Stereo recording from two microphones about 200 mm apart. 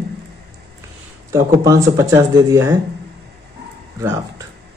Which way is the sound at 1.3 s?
15° right (ahead or behind).